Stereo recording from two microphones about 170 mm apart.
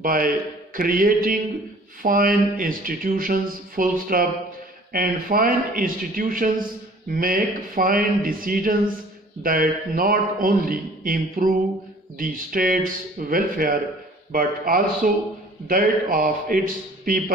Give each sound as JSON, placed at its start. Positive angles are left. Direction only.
{"t": 0.0, "sound": "a man's voice", "side_deg": -60}